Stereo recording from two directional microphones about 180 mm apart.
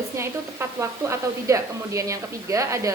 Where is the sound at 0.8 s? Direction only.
15° right (ahead or behind).